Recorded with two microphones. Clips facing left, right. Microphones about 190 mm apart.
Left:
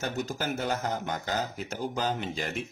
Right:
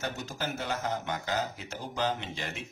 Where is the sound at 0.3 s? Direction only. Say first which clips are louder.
Left 4 dB; 40° left (ahead or behind).